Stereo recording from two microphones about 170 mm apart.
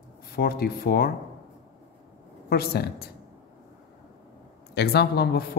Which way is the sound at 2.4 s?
65° left (ahead or behind).